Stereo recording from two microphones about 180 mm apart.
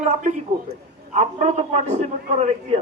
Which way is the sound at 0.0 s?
40° right (ahead or behind).